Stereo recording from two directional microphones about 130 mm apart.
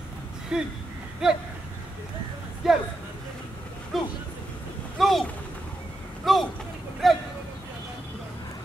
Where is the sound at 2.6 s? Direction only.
Centre (ahead or behind).